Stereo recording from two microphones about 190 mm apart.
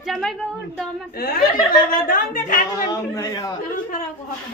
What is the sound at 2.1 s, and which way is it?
Speech, 45° left (ahead or behind).